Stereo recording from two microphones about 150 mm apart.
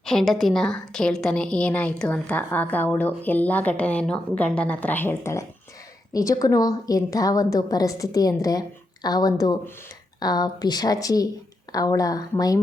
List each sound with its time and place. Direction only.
0.0 s a woman's voice: 5° left (ahead or behind); by 12.5 s 25° left (ahead or behind)